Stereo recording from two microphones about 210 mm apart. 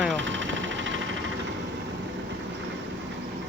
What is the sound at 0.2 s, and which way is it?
Vehicle, 60° right (ahead or behind).